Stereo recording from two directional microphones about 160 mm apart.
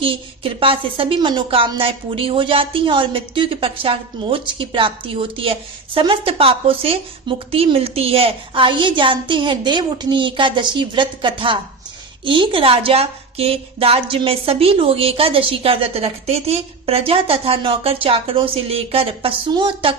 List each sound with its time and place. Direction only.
0.0 s a woman's voice: 35° right (ahead or behind)